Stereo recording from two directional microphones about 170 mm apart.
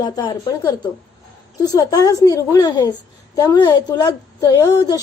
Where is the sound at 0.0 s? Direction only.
25° left (ahead or behind).